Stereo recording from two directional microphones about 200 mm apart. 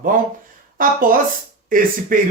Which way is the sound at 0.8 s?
45° right (ahead or behind).